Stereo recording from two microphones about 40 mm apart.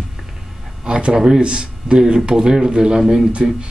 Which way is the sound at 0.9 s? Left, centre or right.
Right.